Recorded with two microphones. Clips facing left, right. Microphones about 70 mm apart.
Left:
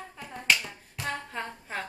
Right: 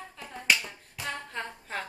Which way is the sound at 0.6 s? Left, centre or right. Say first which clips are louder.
Left 2 dB; centre.